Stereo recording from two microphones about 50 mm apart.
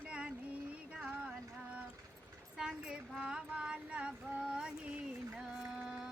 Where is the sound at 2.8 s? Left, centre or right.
Right.